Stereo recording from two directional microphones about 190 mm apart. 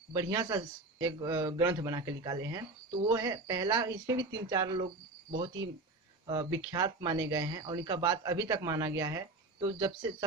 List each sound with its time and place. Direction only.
0.1 s speech: 20° right (ahead or behind)
6.2 s speech: 20° right (ahead or behind)